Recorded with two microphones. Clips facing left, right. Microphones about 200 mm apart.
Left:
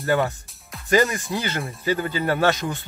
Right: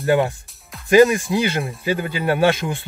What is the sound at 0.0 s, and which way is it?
Speech, 15° right (ahead or behind).